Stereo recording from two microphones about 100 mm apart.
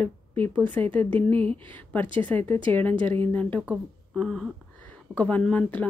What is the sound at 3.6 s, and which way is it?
Speech, 15° right (ahead or behind).